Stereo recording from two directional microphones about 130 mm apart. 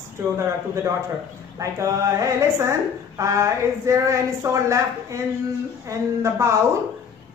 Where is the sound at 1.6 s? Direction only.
25° right (ahead or behind).